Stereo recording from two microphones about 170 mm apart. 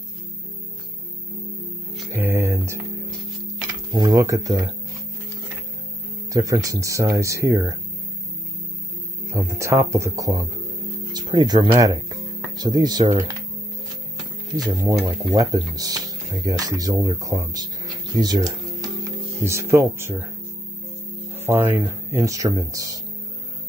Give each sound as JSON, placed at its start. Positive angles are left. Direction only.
{"t": 2.1, "sound": "music", "side_deg": -15}
{"t": 3.9, "sound": "speech", "side_deg": -20}
{"t": 6.3, "sound": "speech", "side_deg": -20}
{"t": 9.3, "sound": "speech", "side_deg": -15}
{"t": 14.6, "sound": "speech", "side_deg": -20}
{"t": 21.5, "sound": "speech", "side_deg": -15}